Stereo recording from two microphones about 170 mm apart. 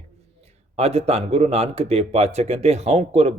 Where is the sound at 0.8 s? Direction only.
35° right (ahead or behind).